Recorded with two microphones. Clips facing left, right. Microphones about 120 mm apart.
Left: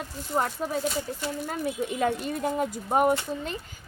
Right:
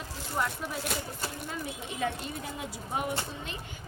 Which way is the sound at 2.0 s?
55° left (ahead or behind).